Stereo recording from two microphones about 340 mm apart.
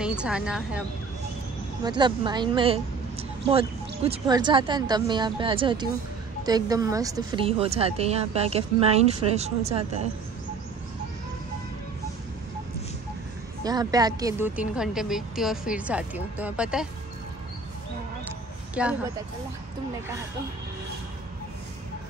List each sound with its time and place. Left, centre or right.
0.0 s speech: centre
1.9 s a woman's voice: centre
13.7 s speech: centre
18.8 s speech: centre